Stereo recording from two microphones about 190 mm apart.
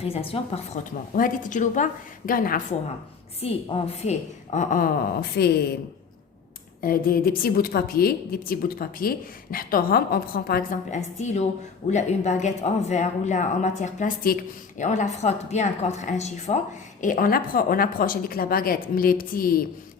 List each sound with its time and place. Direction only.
0.0 s speech: 30° left (ahead or behind)
0.9 s a woman's voice: 45° left (ahead or behind)
3.4 s a woman's voice: 30° left (ahead or behind); by 5.6 s 55° left (ahead or behind)
6.8 s a woman's voice: 50° left (ahead or behind)
17.0 s a woman's voice: 45° left (ahead or behind)